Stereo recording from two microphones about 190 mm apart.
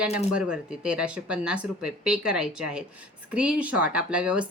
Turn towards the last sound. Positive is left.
turn(degrees=-5)  # may be behind; listen again after turning